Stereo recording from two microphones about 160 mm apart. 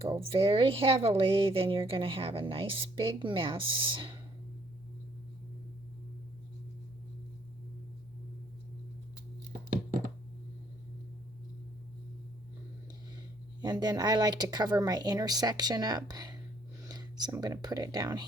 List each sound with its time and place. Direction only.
0.0 s speech: 35° right (ahead or behind)
13.6 s speech: 25° right (ahead or behind)